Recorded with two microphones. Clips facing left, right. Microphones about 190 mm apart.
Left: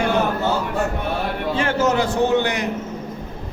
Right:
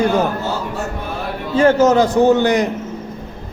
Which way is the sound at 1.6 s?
40° right (ahead or behind).